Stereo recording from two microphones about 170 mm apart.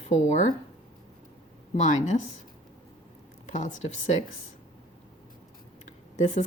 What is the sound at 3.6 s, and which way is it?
Speech, 45° left (ahead or behind).